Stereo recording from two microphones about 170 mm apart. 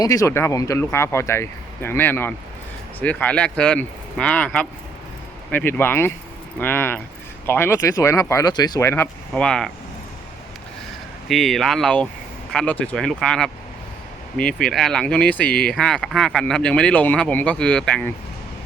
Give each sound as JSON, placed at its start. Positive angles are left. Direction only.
{"t": 0.0, "sound": "speech", "side_deg": 20}
{"t": 11.3, "sound": "speech", "side_deg": 0}